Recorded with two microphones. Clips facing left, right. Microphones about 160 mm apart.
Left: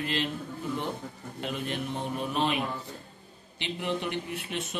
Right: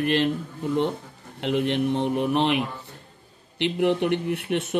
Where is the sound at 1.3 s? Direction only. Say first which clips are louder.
Right 10 dB; 70° right (ahead or behind).